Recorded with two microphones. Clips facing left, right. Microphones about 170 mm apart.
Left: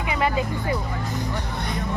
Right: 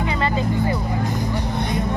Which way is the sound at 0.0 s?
10° left (ahead or behind).